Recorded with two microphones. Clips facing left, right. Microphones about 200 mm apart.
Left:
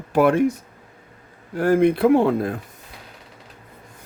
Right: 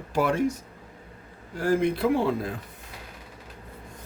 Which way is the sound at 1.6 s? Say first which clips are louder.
Left 7 dB; 60° left (ahead or behind).